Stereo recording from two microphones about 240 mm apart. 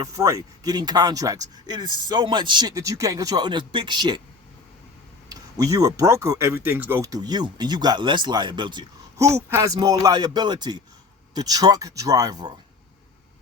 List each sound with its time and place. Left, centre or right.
0.0 s speech: centre
5.3 s speech: centre